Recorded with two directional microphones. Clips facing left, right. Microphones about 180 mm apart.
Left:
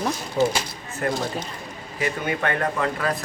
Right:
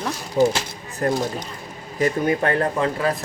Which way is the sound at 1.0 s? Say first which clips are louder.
Right 3 dB; 35° right (ahead or behind).